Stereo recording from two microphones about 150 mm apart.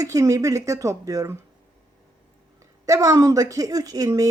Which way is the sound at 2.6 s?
20° right (ahead or behind).